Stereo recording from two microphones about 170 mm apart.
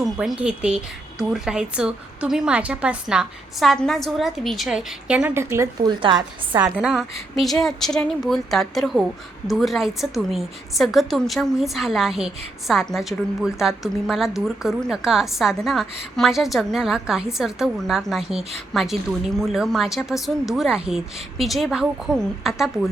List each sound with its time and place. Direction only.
0.0 s a woman's voice: 5° right (ahead or behind)
6.0 s speech: 30° right (ahead or behind)
6.6 s a woman's voice: 5° right (ahead or behind)